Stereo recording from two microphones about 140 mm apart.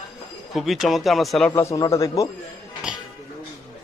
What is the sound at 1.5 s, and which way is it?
Speech, 20° left (ahead or behind).